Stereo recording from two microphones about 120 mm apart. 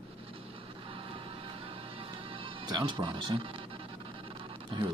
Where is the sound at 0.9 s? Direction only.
50° right (ahead or behind).